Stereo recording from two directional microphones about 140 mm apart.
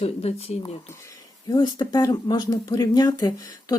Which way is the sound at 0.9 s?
25° left (ahead or behind).